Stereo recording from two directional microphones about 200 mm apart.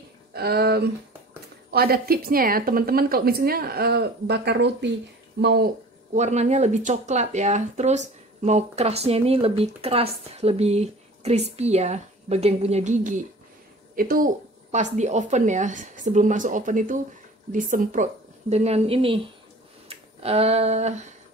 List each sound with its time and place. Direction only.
0.3 s speech: 50° right (ahead or behind)
6.1 s speech: 35° right (ahead or behind)
19.9 s a sound: 30° right (ahead or behind)